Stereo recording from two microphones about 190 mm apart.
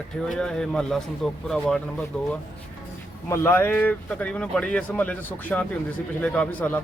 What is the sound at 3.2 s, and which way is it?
Speech, 15° left (ahead or behind).